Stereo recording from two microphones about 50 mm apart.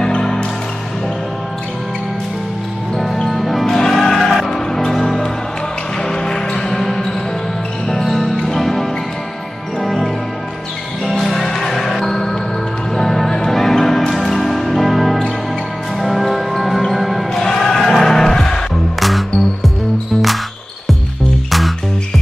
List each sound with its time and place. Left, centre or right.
0.0 s music: centre
3.3 s music: centre
18.9 s music: centre
21.5 s music: centre